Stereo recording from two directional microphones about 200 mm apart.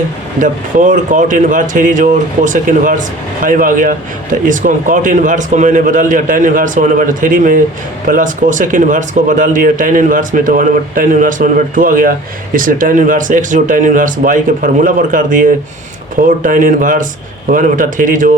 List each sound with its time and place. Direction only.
0.3 s speech: 40° right (ahead or behind)